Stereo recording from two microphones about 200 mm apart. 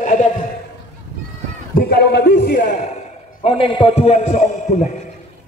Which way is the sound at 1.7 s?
50° left (ahead or behind).